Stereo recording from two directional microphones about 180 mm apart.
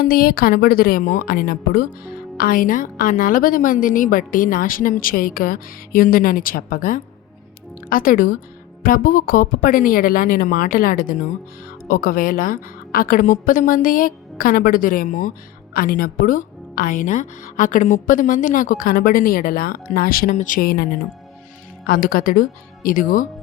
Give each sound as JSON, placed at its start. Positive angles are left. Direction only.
{"t": 0.0, "sound": "a woman's voice", "side_deg": 55}
{"t": 21.8, "sound": "a woman's voice", "side_deg": 50}